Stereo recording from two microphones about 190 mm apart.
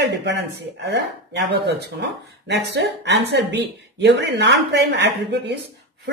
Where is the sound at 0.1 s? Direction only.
65° right (ahead or behind).